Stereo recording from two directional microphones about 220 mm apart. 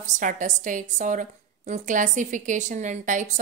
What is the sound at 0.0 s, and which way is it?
A woman's voice, 35° right (ahead or behind).